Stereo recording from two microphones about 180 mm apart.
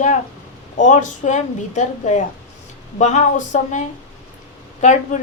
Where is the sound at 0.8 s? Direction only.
40° left (ahead or behind).